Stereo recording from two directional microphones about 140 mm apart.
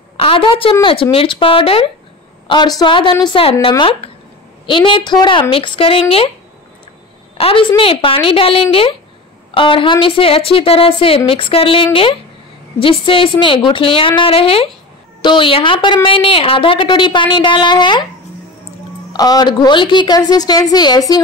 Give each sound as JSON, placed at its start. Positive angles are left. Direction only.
{"t": 0.2, "sound": "a woman's voice", "side_deg": 40}
{"t": 7.3, "sound": "a woman's voice", "side_deg": 40}
{"t": 19.1, "sound": "a woman's voice", "side_deg": 30}